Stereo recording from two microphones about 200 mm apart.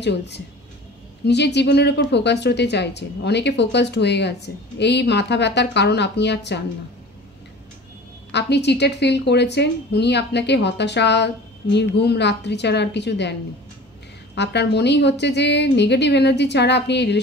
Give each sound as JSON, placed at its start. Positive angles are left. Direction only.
{"t": 0.0, "sound": "a woman's voice", "side_deg": 60}
{"t": 8.3, "sound": "a woman's voice", "side_deg": 60}